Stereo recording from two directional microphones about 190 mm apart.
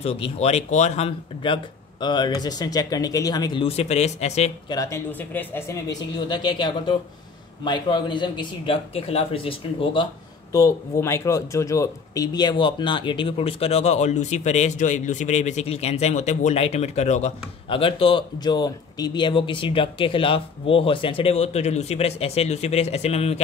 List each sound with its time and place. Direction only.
0.0 s speech: 35° left (ahead or behind)
4.6 s speech: 15° left (ahead or behind)
10.5 s speech: 15° left (ahead or behind); by 23.4 s 35° left (ahead or behind)